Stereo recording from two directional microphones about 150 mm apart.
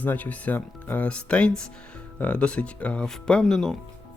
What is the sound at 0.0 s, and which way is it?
Speech, 10° left (ahead or behind).